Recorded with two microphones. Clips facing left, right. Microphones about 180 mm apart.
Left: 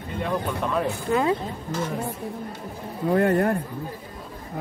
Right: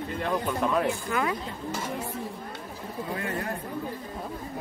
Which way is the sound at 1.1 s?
25° left (ahead or behind).